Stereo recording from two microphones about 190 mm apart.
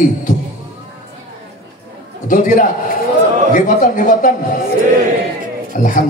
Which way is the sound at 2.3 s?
45° left (ahead or behind).